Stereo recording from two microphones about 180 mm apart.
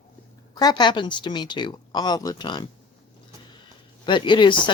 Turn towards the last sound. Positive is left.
turn(degrees=25)  # may be behind; listen again after turning